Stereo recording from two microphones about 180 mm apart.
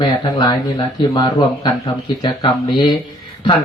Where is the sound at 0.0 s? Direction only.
25° left (ahead or behind).